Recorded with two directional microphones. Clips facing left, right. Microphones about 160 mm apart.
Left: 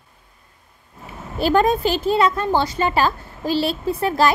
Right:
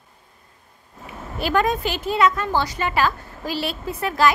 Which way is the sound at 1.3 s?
30° left (ahead or behind).